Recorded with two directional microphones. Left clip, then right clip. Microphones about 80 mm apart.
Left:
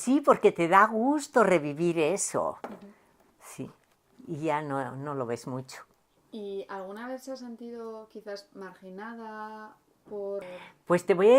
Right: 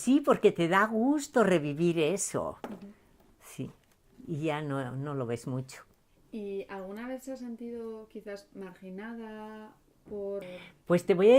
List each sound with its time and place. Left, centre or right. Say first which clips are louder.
0.0 s a woman's voice: left 2 dB; left
3.4 s a sound: left 1 dB; left
4.3 s a woman's voice: left 3 dB; left
7.0 s speech: left 1 dB; centre
10.4 s a woman's voice: left 2 dB; left